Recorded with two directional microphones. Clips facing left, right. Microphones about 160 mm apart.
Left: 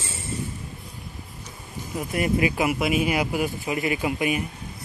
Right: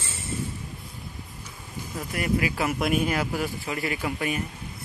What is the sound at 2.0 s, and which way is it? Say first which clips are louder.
Speech: left 3 dB; 20° left (ahead or behind).